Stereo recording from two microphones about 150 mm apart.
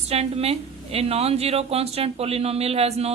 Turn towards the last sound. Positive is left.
turn(degrees=-45)  # may be behind; listen again after turning